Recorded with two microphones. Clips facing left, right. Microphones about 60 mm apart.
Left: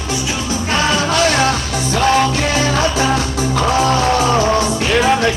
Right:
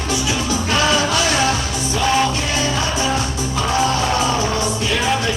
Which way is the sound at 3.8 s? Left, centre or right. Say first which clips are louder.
Left 3 dB; left.